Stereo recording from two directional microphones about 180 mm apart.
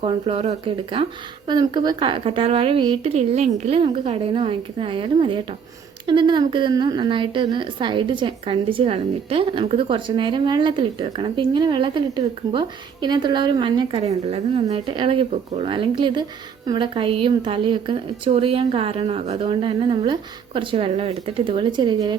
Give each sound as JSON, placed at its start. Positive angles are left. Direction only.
{"t": 0.0, "sound": "a woman's voice", "side_deg": -30}